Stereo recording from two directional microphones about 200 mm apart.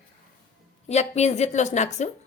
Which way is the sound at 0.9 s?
35° left (ahead or behind).